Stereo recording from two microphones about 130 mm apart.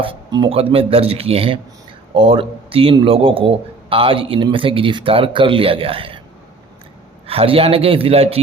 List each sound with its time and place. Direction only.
0.0 s speech: 40° right (ahead or behind)
7.3 s speech: 45° right (ahead or behind)